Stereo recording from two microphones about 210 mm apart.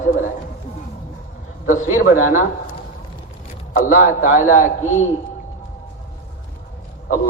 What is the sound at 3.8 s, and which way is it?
A man's voice, 40° left (ahead or behind).